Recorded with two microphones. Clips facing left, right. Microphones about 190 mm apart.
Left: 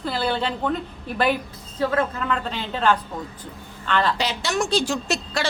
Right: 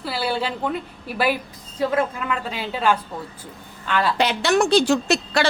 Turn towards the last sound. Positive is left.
turn(degrees=-70)  # may be behind; listen again after turning